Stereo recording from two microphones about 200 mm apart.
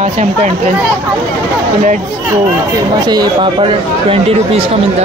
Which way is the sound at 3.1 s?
20° right (ahead or behind).